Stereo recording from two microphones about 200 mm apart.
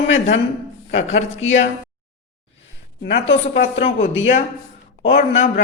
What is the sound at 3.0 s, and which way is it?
Speech, 55° left (ahead or behind).